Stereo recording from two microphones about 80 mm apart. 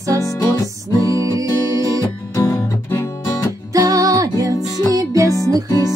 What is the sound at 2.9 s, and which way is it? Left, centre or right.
Guitar, left.